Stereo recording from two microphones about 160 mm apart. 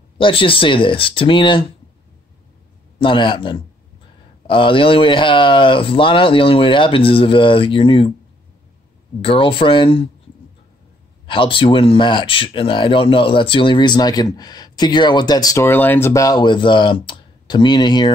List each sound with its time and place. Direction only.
0.2 s speech: 35° left (ahead or behind)
3.0 s speech: 30° left (ahead or behind)
9.2 s speech: 35° left (ahead or behind)
11.2 s speech: 35° left (ahead or behind)